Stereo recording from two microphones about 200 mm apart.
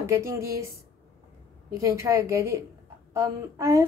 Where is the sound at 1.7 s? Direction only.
15° right (ahead or behind).